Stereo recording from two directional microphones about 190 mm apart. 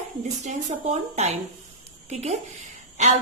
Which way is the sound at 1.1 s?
35° right (ahead or behind).